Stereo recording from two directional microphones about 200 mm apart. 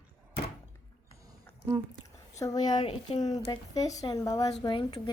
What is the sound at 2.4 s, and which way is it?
Speech, 20° left (ahead or behind).